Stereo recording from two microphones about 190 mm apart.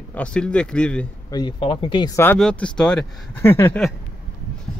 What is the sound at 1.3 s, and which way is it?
Speech, 20° left (ahead or behind).